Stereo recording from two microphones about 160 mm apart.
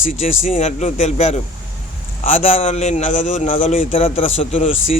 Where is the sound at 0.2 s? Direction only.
45° left (ahead or behind).